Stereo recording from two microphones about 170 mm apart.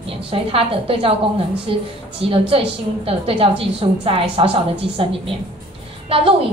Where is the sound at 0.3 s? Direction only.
35° right (ahead or behind).